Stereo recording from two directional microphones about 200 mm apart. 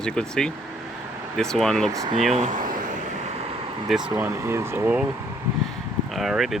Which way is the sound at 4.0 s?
20° right (ahead or behind).